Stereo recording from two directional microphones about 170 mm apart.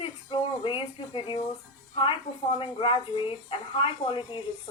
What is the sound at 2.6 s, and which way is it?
Speech, 30° left (ahead or behind).